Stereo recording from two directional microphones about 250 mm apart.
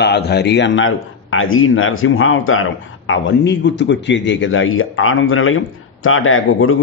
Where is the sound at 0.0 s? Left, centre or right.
Left.